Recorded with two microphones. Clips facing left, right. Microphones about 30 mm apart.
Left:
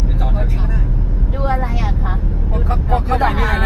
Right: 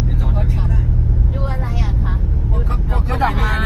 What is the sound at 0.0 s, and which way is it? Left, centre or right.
Vehicle, centre.